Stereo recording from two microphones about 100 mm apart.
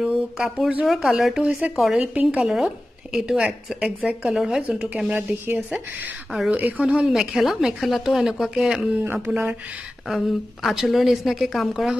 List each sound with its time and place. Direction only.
0.0 s speech: 10° right (ahead or behind)
6.9 s speech: 5° right (ahead or behind)
9.0 s speech: 20° right (ahead or behind)
10.0 s speech: centre (ahead or behind)